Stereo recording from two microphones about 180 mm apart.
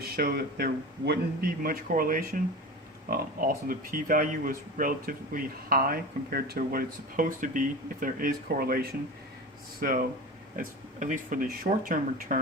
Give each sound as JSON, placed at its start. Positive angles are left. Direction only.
{"t": 0.2, "sound": "speech", "side_deg": -60}